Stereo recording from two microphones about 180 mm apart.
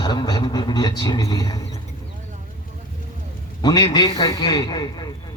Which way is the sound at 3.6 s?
20° left (ahead or behind).